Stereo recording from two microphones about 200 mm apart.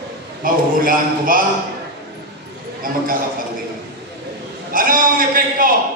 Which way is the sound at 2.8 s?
45° right (ahead or behind).